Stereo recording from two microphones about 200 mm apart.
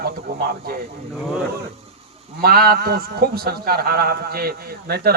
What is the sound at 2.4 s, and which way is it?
A man's voice, 50° right (ahead or behind).